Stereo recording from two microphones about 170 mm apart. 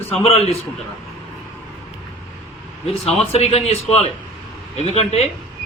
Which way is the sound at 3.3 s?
35° left (ahead or behind).